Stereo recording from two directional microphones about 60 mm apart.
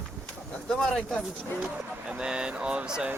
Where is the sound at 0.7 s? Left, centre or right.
Centre.